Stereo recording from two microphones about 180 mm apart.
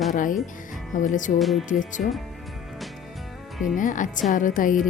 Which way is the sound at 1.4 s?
Centre (ahead or behind).